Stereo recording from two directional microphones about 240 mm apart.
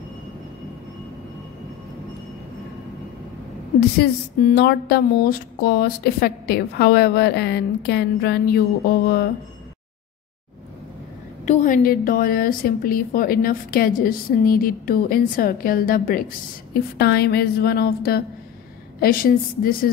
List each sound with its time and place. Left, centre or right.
4.0 s speech: left
11.4 s speech: left